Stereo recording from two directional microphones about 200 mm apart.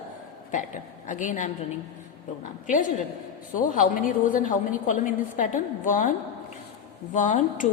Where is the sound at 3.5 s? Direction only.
40° left (ahead or behind).